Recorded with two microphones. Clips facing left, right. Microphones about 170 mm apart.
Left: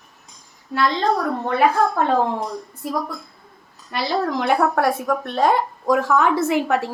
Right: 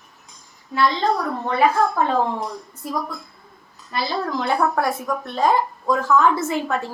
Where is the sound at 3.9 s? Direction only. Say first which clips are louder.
Left 3 dB; 70° left (ahead or behind).